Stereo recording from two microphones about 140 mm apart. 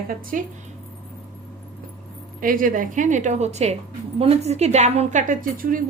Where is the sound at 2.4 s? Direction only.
80° right.